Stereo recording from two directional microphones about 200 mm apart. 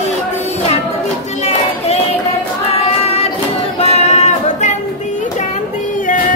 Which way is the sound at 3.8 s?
35° left (ahead or behind).